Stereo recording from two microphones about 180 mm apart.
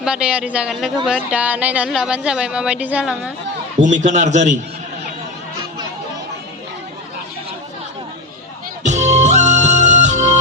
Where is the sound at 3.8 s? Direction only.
40° right (ahead or behind).